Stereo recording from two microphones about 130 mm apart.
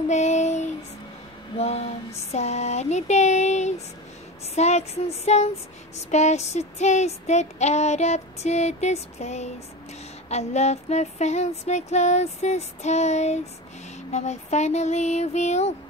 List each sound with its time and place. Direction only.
0.1 s child singing: 65° left (ahead or behind)